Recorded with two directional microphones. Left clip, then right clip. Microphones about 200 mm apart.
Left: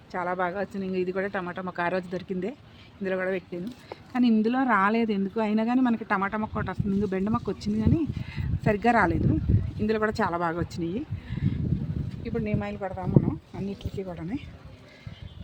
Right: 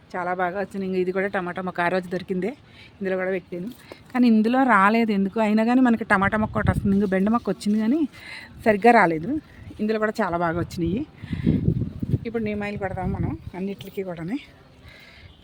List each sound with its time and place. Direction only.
0.1 s speech: 25° right (ahead or behind)
4.1 s speech: 35° right (ahead or behind)